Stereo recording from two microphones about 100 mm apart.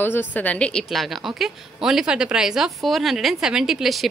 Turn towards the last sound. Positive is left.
turn(degrees=0)  # may be behind; listen again after turning